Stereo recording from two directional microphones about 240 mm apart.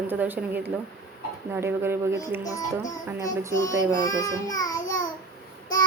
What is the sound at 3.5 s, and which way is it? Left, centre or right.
Child singing, centre.